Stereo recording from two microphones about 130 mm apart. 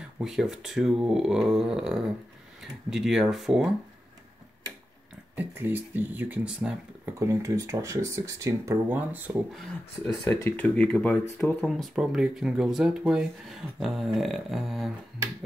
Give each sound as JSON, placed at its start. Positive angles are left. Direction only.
{"t": 0.2, "sound": "speech", "side_deg": -5}
{"t": 5.3, "sound": "speech", "side_deg": -15}
{"t": 7.2, "sound": "speech", "side_deg": -25}
{"t": 8.8, "sound": "speech", "side_deg": -15}
{"t": 10.0, "sound": "speech", "side_deg": 25}
{"t": 10.5, "sound": "speech", "side_deg": 10}
{"t": 11.6, "sound": "speech", "side_deg": 0}